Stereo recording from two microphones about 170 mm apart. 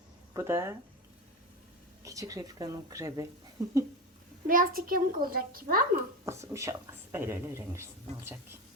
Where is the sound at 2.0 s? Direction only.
20° right (ahead or behind).